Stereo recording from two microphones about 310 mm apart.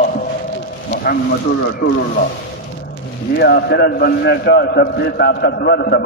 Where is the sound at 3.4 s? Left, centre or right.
Left.